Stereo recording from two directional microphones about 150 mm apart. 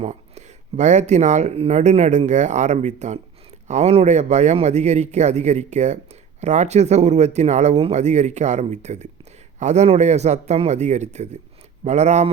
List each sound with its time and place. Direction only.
0.0 s speech: 50° right (ahead or behind)